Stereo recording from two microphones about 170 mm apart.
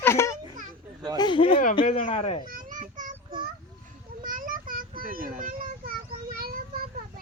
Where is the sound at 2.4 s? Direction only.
55° right (ahead or behind).